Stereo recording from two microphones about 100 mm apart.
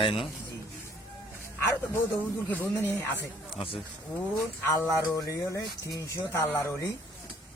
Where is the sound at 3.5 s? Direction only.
65° left (ahead or behind).